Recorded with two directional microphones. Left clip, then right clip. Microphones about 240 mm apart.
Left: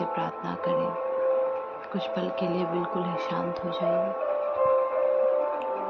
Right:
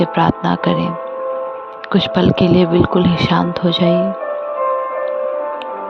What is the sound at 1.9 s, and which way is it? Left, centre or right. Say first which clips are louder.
Speech: right 16 dB; right.